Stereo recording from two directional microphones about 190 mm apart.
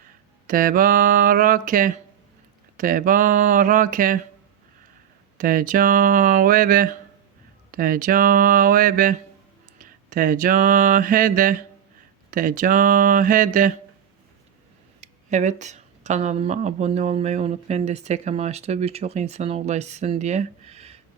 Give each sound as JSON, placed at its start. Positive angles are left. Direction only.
{"t": 0.4, "sound": "speech", "side_deg": -45}
{"t": 5.4, "sound": "speech", "side_deg": -45}
{"t": 9.7, "sound": "mantra", "side_deg": -45}
{"t": 12.3, "sound": "speech", "side_deg": -45}
{"t": 15.0, "sound": "speech", "side_deg": -40}